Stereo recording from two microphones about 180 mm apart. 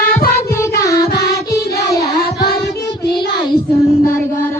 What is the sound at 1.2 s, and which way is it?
Music, 60° left (ahead or behind).